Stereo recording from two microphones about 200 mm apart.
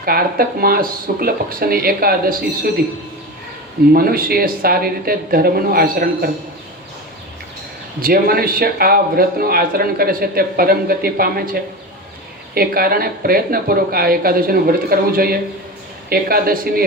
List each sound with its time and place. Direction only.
0.0 s a man's voice: 50° right (ahead or behind)
3.9 s a man's voice: 50° right (ahead or behind)
8.0 s a man's voice: 50° right (ahead or behind)